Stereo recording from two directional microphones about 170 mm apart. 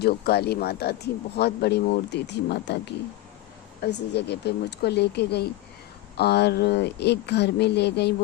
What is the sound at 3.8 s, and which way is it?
Speech, 80° left.